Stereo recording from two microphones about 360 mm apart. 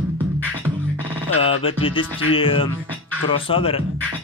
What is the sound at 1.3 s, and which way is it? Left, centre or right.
Speech, left.